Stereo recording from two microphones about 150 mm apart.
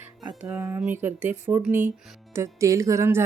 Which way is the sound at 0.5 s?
20° right (ahead or behind).